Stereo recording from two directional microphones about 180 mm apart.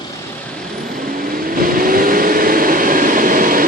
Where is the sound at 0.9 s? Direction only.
50° right (ahead or behind).